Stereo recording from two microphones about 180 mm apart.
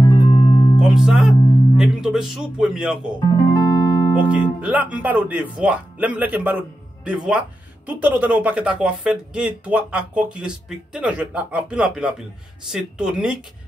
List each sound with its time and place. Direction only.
0.0 s music: 20° left (ahead or behind)
0.7 s speech: 5° right (ahead or behind)
3.5 s music: 20° left (ahead or behind)
4.1 s speech: 5° right (ahead or behind)